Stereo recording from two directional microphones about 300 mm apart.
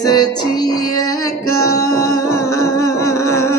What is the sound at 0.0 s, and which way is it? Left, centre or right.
Music, centre.